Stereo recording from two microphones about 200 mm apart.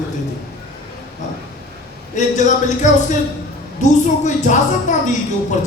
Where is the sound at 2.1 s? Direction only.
35° left (ahead or behind).